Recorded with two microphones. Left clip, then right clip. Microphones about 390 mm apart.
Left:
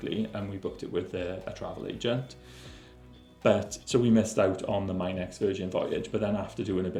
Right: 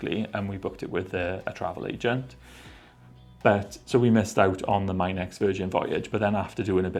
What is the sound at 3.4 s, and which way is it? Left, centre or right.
Speech, right.